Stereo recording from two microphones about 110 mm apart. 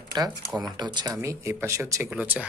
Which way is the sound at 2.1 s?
10° right (ahead or behind).